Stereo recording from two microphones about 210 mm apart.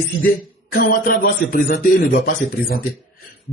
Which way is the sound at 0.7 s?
45° left (ahead or behind).